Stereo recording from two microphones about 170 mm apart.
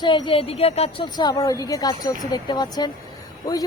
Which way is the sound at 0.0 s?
30° left (ahead or behind).